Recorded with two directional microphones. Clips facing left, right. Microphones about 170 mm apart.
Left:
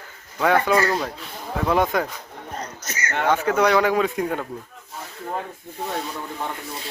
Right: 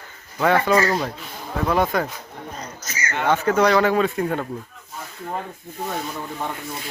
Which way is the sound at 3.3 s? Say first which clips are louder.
Right 1 dB; 10° left (ahead or behind).